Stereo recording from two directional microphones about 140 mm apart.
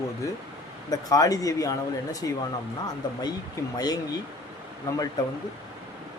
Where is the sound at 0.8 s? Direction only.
25° left (ahead or behind).